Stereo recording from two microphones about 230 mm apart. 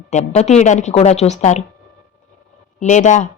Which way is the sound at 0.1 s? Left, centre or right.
Left.